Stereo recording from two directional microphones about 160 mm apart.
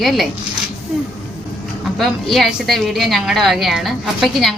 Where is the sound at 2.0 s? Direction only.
Centre (ahead or behind).